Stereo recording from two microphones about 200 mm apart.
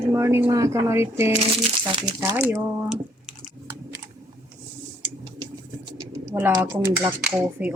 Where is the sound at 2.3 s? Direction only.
10° right (ahead or behind).